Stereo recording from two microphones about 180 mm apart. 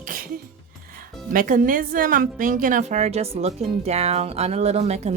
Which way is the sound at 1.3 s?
50° right (ahead or behind).